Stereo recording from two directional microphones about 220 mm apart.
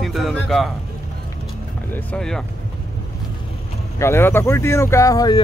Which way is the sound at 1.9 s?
5° left (ahead or behind).